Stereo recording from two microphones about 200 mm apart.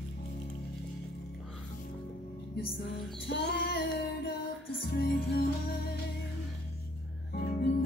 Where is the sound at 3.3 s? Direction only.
55° left (ahead or behind).